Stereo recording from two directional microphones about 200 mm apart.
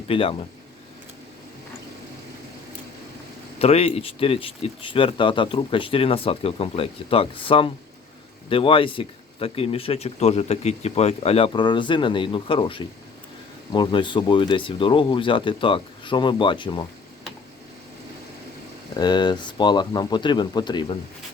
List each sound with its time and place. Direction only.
0.1 s speech: 30° left (ahead or behind)
3.6 s speech: 30° left (ahead or behind)
18.9 s speech: 20° left (ahead or behind)